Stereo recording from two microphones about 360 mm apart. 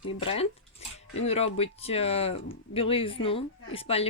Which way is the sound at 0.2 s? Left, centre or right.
Centre.